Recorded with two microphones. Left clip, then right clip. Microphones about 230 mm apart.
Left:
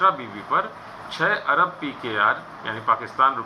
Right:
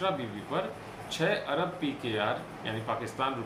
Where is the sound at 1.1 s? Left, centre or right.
Right.